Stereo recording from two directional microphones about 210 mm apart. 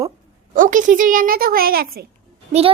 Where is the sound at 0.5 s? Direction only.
40° right (ahead or behind).